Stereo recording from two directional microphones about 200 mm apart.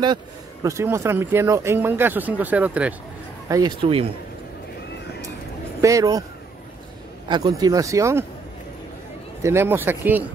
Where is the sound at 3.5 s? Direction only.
25° right (ahead or behind).